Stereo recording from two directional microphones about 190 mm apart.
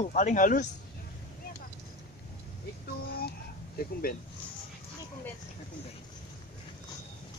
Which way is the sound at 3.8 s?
50° left (ahead or behind).